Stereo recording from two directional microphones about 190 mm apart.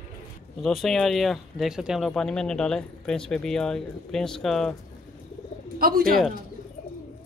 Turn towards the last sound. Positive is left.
turn(degrees=-50)  # may be behind; listen again after turning